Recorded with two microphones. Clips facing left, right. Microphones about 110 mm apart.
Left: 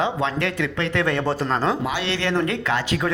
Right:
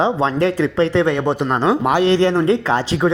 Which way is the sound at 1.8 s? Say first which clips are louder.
Right 10 dB; 50° right (ahead or behind).